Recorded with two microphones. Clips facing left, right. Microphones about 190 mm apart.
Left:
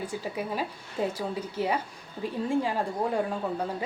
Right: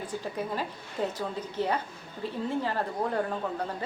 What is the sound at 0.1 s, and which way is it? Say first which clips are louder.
A woman's voice: left 1 dB; 10° left (ahead or behind).